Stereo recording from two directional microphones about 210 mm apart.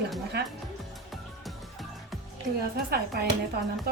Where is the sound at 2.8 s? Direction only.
45° right (ahead or behind).